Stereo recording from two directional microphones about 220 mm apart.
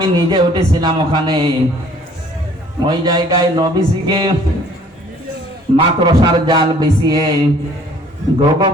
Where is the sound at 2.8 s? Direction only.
20° right (ahead or behind).